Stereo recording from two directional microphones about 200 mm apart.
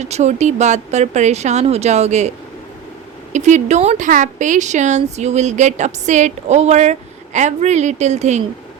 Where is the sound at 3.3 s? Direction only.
35° right (ahead or behind).